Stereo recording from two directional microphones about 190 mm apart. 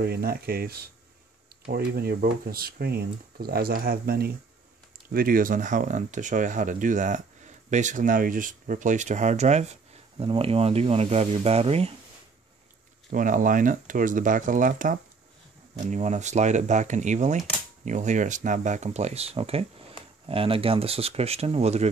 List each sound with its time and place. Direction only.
0.0 s speech: 55° right (ahead or behind); by 11.9 s 30° right (ahead or behind)
13.1 s speech: 45° right (ahead or behind)